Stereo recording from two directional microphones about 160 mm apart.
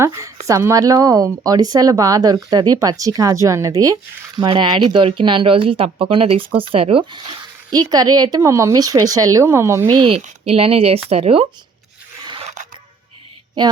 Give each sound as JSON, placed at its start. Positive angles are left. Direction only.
{"t": 0.0, "sound": "speech", "side_deg": -15}
{"t": 9.8, "sound": "speech", "side_deg": -30}
{"t": 12.2, "sound": "scissors", "side_deg": -30}